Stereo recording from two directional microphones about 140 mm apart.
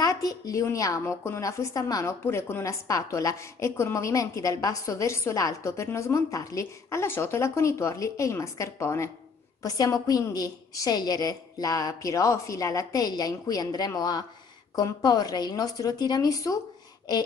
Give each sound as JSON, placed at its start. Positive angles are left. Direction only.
{"t": 0.0, "sound": "a woman's voice", "side_deg": 25}